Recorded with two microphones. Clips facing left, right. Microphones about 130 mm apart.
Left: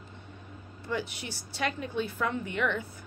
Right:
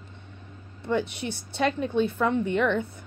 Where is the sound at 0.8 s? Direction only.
20° right (ahead or behind).